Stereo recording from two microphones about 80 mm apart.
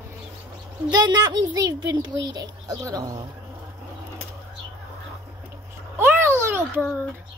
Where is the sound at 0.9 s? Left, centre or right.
Right.